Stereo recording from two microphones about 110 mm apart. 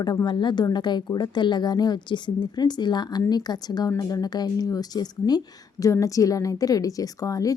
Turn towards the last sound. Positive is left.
turn(degrees=30)  # may be behind; listen again after turning